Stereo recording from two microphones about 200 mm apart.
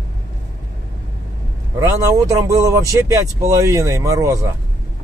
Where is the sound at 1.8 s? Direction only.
15° right (ahead or behind).